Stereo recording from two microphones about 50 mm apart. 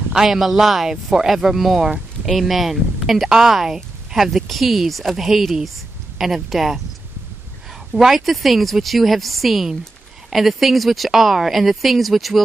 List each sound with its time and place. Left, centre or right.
0.1 s speech: centre
7.9 s speech: centre